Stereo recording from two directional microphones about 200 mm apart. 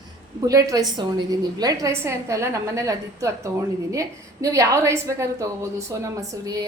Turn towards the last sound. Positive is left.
turn(degrees=-15)  # may be behind; listen again after turning